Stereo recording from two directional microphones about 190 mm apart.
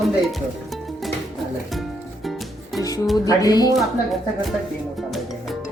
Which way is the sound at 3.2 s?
20° left (ahead or behind).